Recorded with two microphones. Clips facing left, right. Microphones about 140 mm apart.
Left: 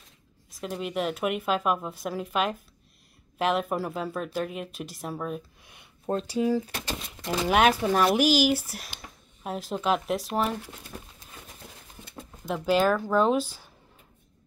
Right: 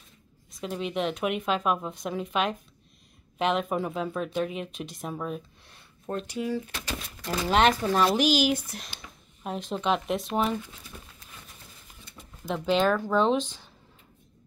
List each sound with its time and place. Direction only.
0.6 s speech: centre (ahead or behind)
5.7 s a sound: 15° left (ahead or behind)
6.1 s speech: 30° left (ahead or behind)
7.4 s speech: 10° left (ahead or behind)
10.9 s a sound: 45° left (ahead or behind)
12.4 s speech: 5° left (ahead or behind)